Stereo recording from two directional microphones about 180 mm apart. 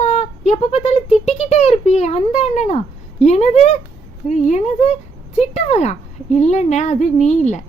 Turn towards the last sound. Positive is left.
turn(degrees=40)  # may be behind; listen again after turning